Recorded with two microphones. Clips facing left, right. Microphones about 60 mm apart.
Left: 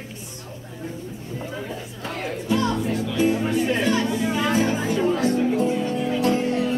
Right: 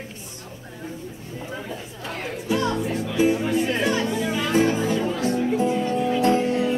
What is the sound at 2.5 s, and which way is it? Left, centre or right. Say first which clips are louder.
Music: left 1 dB; centre.